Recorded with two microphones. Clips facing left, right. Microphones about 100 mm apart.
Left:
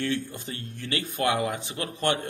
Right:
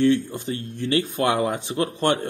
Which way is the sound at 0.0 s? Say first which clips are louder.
Right 10 dB; 25° right (ahead or behind).